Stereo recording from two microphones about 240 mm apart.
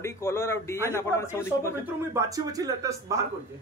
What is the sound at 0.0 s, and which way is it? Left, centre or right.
A man's voice, centre.